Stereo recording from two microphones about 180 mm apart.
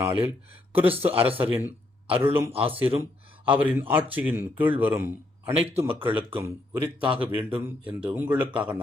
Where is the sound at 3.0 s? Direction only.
10° right (ahead or behind).